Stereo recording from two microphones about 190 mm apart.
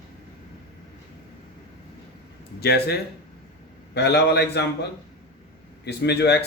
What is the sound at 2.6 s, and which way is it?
A man's voice, 55° left (ahead or behind).